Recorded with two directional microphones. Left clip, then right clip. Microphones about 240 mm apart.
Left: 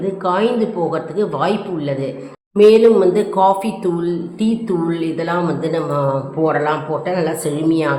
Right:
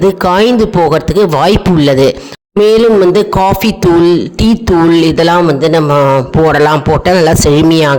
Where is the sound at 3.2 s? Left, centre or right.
Right.